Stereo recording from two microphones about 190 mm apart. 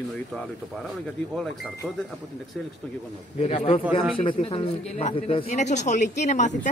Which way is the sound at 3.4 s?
30° left (ahead or behind).